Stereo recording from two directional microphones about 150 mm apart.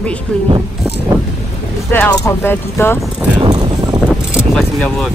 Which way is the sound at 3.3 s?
30° right (ahead or behind).